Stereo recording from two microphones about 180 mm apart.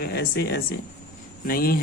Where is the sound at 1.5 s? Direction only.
55° left (ahead or behind).